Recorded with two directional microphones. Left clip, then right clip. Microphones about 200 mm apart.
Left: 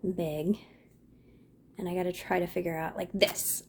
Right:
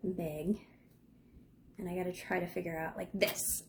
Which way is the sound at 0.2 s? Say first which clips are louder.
Left 6 dB; 40° left (ahead or behind).